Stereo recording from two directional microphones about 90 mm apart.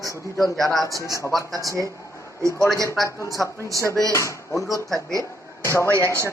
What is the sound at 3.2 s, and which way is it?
Speech, 40° left (ahead or behind).